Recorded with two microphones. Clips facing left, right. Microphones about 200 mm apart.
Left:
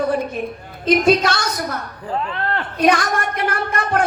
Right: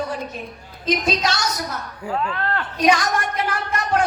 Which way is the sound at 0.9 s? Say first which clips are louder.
Left 7 dB; 55° left (ahead or behind).